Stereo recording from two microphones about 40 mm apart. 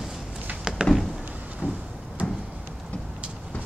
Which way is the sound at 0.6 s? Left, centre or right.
Centre.